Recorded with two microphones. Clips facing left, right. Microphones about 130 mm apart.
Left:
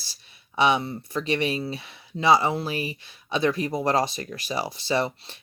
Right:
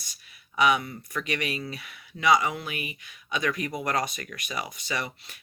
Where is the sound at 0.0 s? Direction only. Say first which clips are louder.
Left 1 dB; 30° left (ahead or behind).